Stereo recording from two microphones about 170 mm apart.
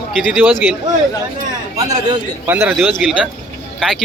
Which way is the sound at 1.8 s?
20° right (ahead or behind).